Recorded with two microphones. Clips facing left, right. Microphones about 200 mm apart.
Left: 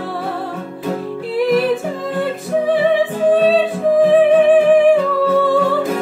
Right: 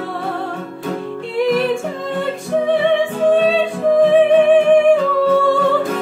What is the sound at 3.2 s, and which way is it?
Music, centre (ahead or behind).